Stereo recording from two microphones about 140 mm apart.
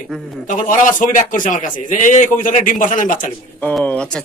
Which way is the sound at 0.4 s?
65° left (ahead or behind).